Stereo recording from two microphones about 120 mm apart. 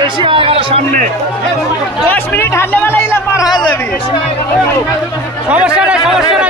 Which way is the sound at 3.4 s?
35° left (ahead or behind).